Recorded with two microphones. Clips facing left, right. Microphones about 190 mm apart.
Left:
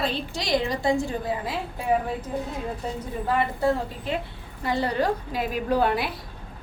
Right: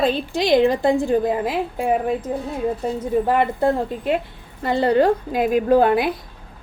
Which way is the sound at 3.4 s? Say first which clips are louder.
Right 5 dB; 55° right (ahead or behind).